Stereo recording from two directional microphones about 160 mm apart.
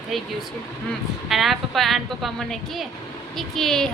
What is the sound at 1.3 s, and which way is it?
A woman's voice, centre (ahead or behind).